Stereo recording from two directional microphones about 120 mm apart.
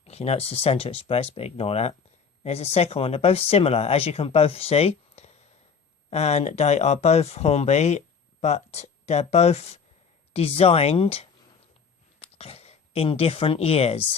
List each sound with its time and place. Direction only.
0.0 s speech: 60° left (ahead or behind)